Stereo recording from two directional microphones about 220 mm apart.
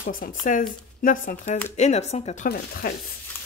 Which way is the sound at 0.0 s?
40° left (ahead or behind).